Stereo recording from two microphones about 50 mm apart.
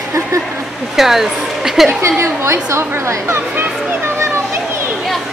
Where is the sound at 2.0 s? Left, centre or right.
Right.